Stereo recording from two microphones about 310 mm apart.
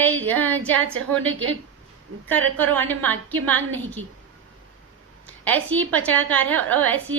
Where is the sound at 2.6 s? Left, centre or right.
Centre.